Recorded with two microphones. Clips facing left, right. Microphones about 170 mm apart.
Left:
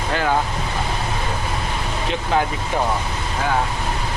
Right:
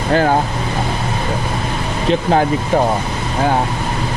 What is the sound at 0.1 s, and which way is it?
Speech, 40° right (ahead or behind).